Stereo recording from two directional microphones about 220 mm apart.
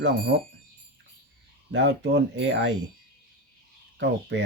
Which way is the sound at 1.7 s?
55° right (ahead or behind).